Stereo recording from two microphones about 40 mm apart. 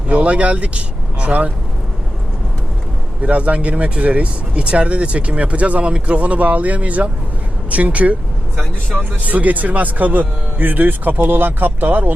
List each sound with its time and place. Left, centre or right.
0.1 s speech: right
3.2 s speech: right
9.2 s speech: right